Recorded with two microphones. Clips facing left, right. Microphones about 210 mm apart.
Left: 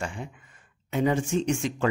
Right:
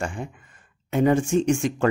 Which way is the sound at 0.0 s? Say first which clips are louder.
Right 4 dB; 50° right (ahead or behind).